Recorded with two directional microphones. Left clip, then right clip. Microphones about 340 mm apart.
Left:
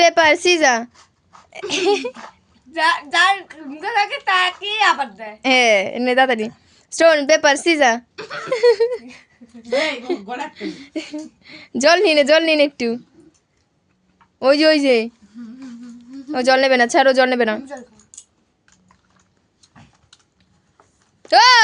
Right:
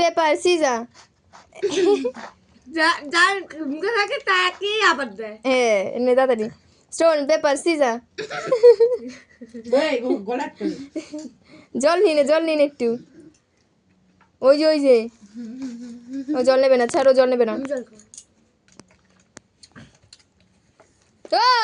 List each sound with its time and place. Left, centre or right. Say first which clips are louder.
0.0 s a woman's voice: left 5 dB; centre
14.3 s a woman's voice: left 2 dB; left
16.3 s a woman's voice: left 1 dB; left
21.2 s speech: left 6 dB; left